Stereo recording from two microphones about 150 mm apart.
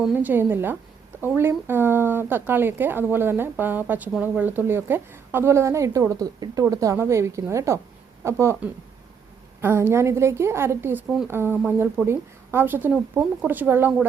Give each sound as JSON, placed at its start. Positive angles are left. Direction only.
{"t": 0.1, "sound": "speech", "side_deg": -10}